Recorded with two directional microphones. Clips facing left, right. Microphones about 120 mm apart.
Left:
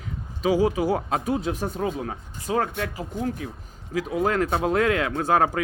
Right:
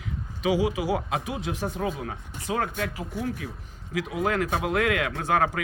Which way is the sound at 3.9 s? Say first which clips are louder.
Left 3 dB; 40° left (ahead or behind).